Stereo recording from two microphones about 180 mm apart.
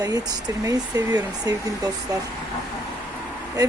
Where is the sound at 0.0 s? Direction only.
20° right (ahead or behind).